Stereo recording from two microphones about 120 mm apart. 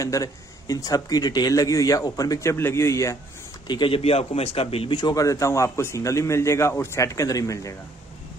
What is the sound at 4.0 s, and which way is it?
A man's voice, 55° left (ahead or behind).